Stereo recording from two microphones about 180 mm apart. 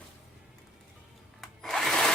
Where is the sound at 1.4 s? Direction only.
Centre (ahead or behind).